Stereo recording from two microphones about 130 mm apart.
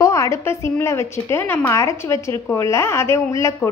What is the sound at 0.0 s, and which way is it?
A woman's voice, 25° left (ahead or behind).